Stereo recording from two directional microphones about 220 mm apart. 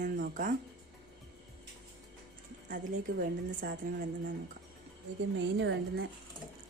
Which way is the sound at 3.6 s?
40° right (ahead or behind).